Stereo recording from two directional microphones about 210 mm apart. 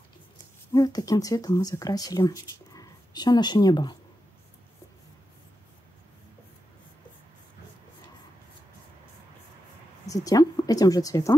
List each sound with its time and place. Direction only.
0.7 s speech: 20° left (ahead or behind)
10.0 s speech: 15° left (ahead or behind)